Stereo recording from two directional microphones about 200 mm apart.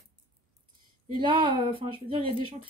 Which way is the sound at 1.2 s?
25° right (ahead or behind).